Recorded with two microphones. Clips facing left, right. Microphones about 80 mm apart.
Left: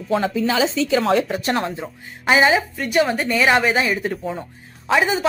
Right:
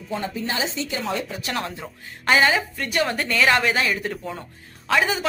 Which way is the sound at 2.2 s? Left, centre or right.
Centre.